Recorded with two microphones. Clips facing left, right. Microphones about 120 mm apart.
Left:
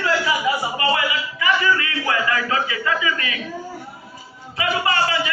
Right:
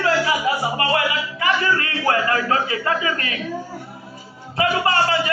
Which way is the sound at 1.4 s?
50° right (ahead or behind).